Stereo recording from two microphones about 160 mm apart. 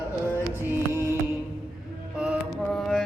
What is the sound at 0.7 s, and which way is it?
Music, 15° right (ahead or behind).